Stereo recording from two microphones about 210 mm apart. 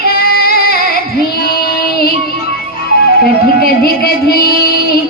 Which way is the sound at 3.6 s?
45° left (ahead or behind).